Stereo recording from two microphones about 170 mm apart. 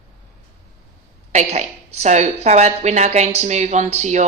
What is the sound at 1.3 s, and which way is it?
A woman's voice, 40° right (ahead or behind).